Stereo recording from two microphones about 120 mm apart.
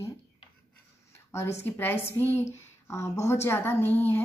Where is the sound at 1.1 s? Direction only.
20° left (ahead or behind).